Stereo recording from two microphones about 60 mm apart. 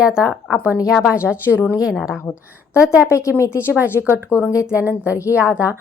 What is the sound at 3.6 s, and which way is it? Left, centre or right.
A woman's voice, right.